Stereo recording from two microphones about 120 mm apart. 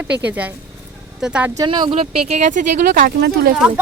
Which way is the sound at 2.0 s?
70° right (ahead or behind).